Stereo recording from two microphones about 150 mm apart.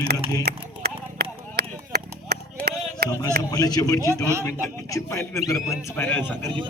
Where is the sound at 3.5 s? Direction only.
25° left (ahead or behind).